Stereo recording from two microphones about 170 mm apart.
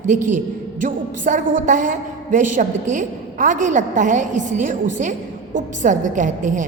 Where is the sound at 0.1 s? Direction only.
45° right (ahead or behind).